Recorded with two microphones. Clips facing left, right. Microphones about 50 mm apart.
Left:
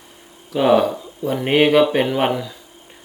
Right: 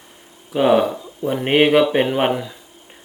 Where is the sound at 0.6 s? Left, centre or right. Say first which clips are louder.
Even; centre.